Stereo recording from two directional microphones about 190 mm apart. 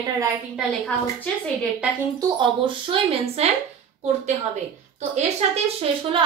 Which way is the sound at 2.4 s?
25° right (ahead or behind).